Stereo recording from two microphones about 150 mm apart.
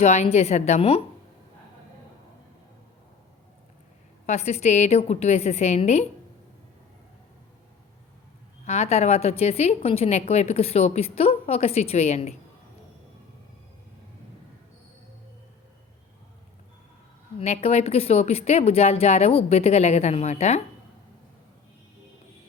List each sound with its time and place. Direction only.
0.0 s a woman's voice: 45° left (ahead or behind)
4.3 s a woman's voice: 45° left (ahead or behind)
8.6 s a woman's voice: 45° left (ahead or behind)
17.4 s a woman's voice: 45° left (ahead or behind)